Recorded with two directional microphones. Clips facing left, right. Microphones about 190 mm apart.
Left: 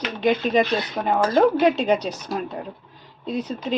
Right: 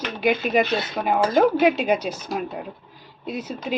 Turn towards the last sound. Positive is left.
turn(degrees=-5)  # may be behind; listen again after turning